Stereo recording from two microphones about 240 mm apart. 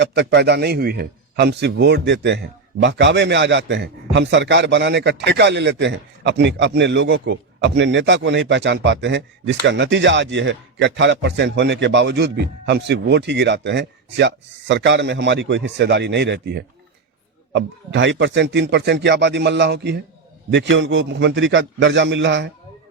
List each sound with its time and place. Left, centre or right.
0.0 s a man's voice: right